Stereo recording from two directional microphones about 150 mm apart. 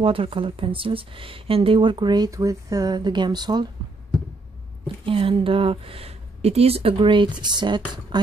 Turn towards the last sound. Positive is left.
turn(degrees=-30)  # may be behind; listen again after turning